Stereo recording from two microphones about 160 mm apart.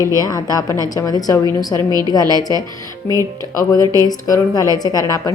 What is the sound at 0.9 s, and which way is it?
Speech, 20° left (ahead or behind).